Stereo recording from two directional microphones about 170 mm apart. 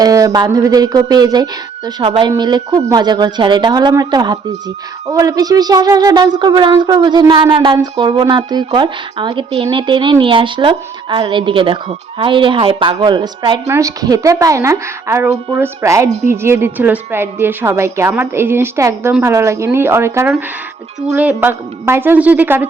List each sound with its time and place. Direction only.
0.0 s a woman's voice: 20° right (ahead or behind)